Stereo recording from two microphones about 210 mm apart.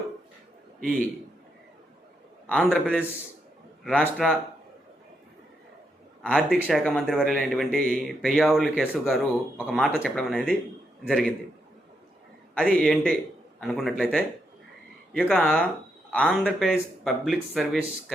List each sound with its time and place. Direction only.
2.5 s speech: centre (ahead or behind)
6.3 s speech: centre (ahead or behind)
12.5 s speech: 5° left (ahead or behind)